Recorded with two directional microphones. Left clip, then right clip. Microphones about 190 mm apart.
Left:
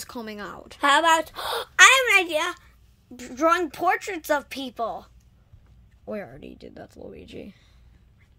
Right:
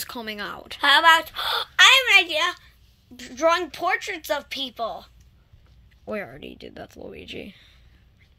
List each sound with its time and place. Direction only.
0.0 s a woman's voice: 5° left (ahead or behind)
0.7 s a woman's voice: 45° left (ahead or behind)
6.0 s speech: centre (ahead or behind)